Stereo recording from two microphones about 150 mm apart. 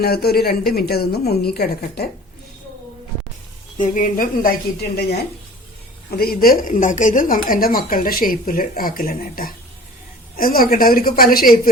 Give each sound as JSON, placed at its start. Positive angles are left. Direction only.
{"t": 0.0, "sound": "a woman's voice", "side_deg": 90}
{"t": 3.8, "sound": "a woman's voice", "side_deg": 60}